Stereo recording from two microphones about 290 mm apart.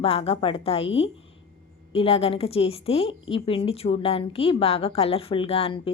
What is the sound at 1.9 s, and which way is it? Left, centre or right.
A woman's voice, centre.